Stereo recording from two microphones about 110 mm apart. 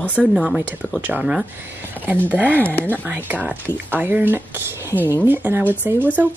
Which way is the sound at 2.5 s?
15° left (ahead or behind).